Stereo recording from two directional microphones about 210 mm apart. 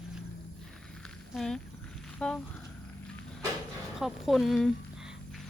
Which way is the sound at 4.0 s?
Centre (ahead or behind).